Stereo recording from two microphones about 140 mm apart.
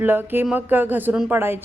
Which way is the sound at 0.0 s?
15° right (ahead or behind).